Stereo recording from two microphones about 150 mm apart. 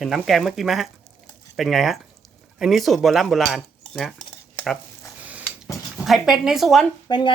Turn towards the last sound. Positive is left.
turn(degrees=35)  # may be behind; listen again after turning